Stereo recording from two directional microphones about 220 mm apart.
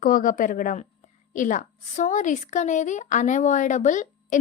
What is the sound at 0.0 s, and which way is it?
A woman's voice, 40° left (ahead or behind).